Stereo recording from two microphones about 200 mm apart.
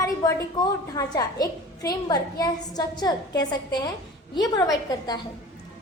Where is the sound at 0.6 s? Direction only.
20° left (ahead or behind).